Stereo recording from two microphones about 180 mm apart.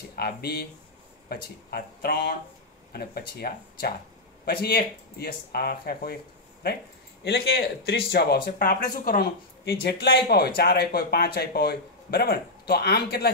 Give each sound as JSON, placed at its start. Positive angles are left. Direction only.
{"t": 0.1, "sound": "speech", "side_deg": 60}
{"t": 7.2, "sound": "speech", "side_deg": 65}